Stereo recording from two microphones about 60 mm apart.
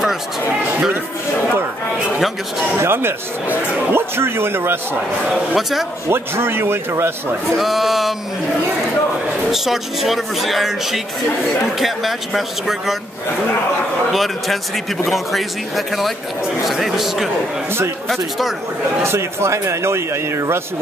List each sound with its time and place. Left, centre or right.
2.8 s speech: right
5.6 s speech: centre
6.0 s a man's voice: right
7.5 s speech: centre
9.5 s speech: centre
14.1 s speech: centre
19.0 s a man's voice: right